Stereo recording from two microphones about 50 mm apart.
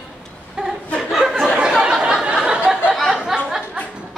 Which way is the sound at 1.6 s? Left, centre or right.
Centre.